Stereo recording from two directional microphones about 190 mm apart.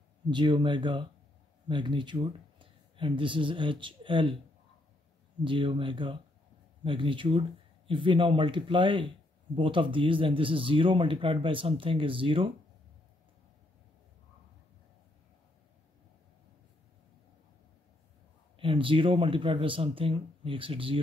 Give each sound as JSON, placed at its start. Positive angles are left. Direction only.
{"t": 0.3, "sound": "speech", "side_deg": -25}
{"t": 5.4, "sound": "speech", "side_deg": -25}
{"t": 18.6, "sound": "speech", "side_deg": -25}